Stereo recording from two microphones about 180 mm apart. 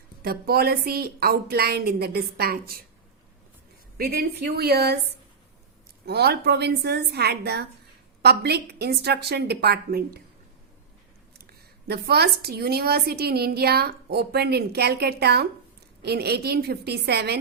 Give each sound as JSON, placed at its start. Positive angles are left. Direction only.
{"t": 0.2, "sound": "a woman's voice", "side_deg": -60}
{"t": 3.9, "sound": "a woman's voice", "side_deg": -55}
{"t": 6.1, "sound": "a woman's voice", "side_deg": -65}
{"t": 11.9, "sound": "a woman's voice", "side_deg": -65}